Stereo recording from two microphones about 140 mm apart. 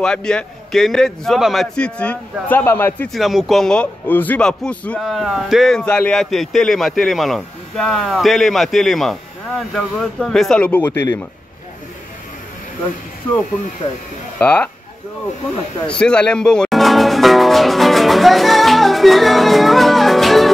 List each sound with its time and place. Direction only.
0.0 s a man's voice: 5° left (ahead or behind)
3.1 s a man's voice: centre (ahead or behind)
10.9 s speech: 20° left (ahead or behind)
14.4 s speech: 10° left (ahead or behind)
15.9 s music: 5° left (ahead or behind)